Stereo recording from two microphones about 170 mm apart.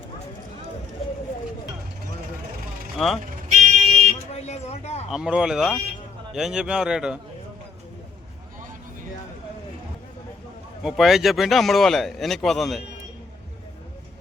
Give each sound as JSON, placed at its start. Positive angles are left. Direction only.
{"t": 3.0, "sound": "speech", "side_deg": 0}
{"t": 3.5, "sound": "vehicle", "side_deg": -45}
{"t": 4.3, "sound": "a sound", "side_deg": 40}
{"t": 5.1, "sound": "speech", "side_deg": -5}
{"t": 10.8, "sound": "speech", "side_deg": 0}